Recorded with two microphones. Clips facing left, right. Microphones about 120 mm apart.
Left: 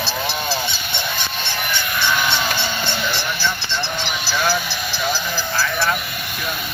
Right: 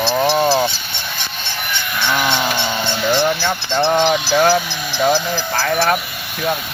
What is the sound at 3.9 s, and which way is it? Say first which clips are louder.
Speech: right 12 dB; 75° right (ahead or behind).